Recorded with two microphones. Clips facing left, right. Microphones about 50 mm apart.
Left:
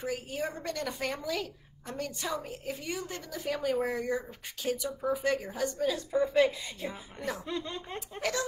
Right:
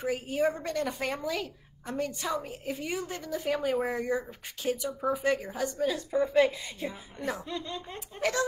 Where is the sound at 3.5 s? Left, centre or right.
Centre.